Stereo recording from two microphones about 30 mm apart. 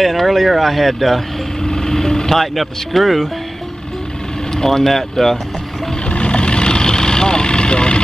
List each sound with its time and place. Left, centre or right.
0.0 s speech: centre
1.6 s speech: centre
4.6 s speech: centre
6.0 s vehicle: left